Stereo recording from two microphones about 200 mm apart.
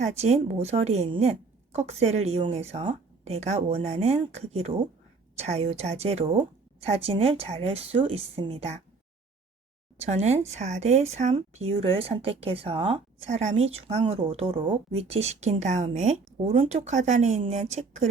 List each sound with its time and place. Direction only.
0.0 s speech: 35° right (ahead or behind)
10.1 s speech: 35° right (ahead or behind)